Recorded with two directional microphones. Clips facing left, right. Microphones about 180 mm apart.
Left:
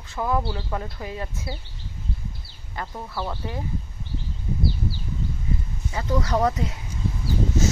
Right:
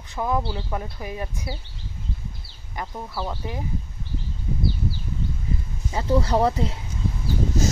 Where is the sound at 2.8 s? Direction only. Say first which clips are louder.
Even; 15° right (ahead or behind).